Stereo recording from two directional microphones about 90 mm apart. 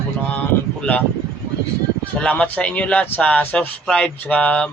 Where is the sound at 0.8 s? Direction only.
20° left (ahead or behind).